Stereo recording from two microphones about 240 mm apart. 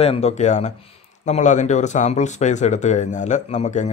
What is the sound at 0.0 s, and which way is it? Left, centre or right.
Speech, left.